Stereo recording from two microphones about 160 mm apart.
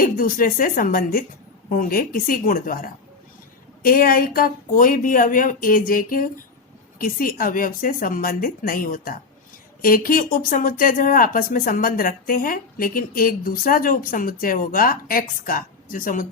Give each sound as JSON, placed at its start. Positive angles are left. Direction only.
{"t": 0.0, "sound": "speech", "side_deg": 60}